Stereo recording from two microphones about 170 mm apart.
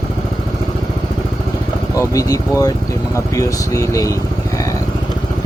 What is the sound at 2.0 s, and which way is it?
Speech, 20° left (ahead or behind).